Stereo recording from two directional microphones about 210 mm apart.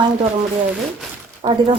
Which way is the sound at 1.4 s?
25° right (ahead or behind).